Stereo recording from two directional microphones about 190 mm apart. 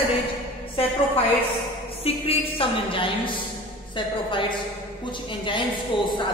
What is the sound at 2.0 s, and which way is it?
A woman's voice, 30° left (ahead or behind).